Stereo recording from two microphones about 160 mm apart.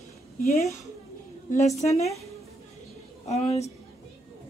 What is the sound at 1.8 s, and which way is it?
Speech, 40° left (ahead or behind).